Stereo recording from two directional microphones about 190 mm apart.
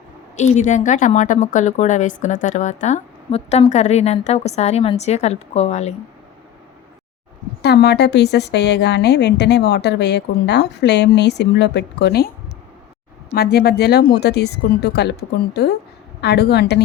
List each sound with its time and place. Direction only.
0.3 s a woman's voice: 35° left (ahead or behind)
7.6 s a woman's voice: 60° left (ahead or behind)
13.3 s a woman's voice: 55° left (ahead or behind)